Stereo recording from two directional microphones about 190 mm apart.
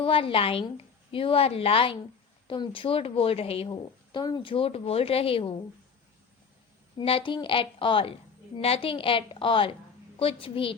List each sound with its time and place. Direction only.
0.0 s a woman's voice: 30° left (ahead or behind)
6.9 s a woman's voice: 30° left (ahead or behind)